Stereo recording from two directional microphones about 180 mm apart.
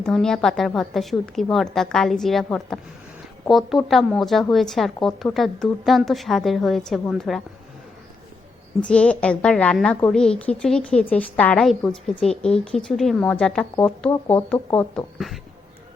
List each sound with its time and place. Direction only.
0.0 s a woman's voice: 5° left (ahead or behind)
8.8 s a woman's voice: 5° left (ahead or behind)